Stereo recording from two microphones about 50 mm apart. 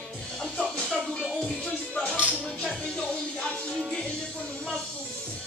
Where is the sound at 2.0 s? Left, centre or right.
Left.